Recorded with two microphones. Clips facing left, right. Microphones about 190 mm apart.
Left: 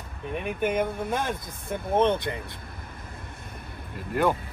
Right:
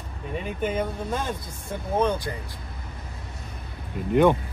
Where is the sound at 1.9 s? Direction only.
25° left (ahead or behind).